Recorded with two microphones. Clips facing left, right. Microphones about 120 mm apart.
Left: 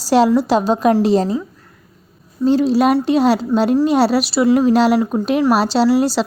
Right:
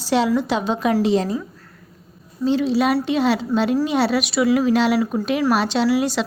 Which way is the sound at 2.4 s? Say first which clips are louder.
Left 5 dB; 40° left (ahead or behind).